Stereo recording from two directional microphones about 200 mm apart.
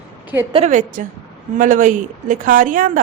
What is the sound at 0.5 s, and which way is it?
A woman's voice, 35° right (ahead or behind).